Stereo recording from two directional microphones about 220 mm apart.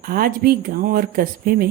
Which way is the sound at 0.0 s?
40° right (ahead or behind).